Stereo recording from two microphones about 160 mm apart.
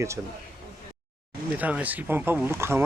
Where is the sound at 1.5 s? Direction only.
10° right (ahead or behind).